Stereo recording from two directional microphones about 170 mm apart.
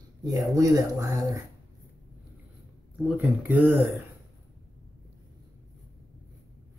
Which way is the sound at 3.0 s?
5° right (ahead or behind).